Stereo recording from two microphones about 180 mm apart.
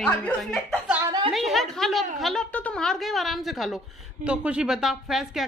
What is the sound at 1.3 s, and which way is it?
A woman's voice, centre (ahead or behind).